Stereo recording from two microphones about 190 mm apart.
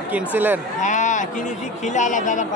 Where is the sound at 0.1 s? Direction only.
10° right (ahead or behind).